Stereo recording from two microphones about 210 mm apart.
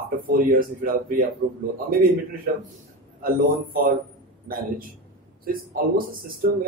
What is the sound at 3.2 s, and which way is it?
Speech, 40° right (ahead or behind).